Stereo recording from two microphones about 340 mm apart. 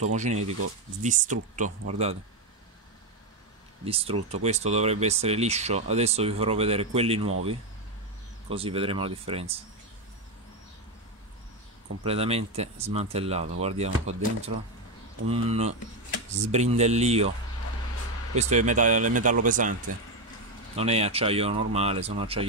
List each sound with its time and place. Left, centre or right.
0.0 s speech: centre
3.8 s speech: centre
12.0 s speech: centre
18.3 s speech: centre
20.7 s speech: centre